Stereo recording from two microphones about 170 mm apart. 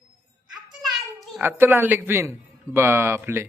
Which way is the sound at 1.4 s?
15° right (ahead or behind).